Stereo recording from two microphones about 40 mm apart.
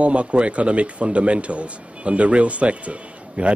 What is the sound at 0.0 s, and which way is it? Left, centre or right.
Speech, right.